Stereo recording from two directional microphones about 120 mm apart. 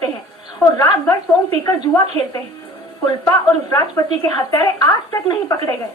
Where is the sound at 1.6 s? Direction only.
30° left (ahead or behind).